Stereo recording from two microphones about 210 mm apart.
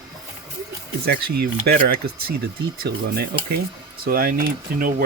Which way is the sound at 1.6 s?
45° right (ahead or behind).